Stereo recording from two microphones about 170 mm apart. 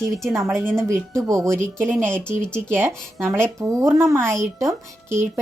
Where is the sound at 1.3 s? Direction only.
15° right (ahead or behind).